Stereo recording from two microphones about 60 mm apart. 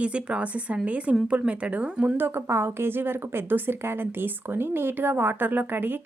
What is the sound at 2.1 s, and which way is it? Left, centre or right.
A woman's voice, right.